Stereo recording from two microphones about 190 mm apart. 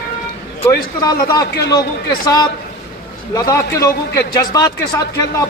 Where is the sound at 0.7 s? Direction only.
20° left (ahead or behind).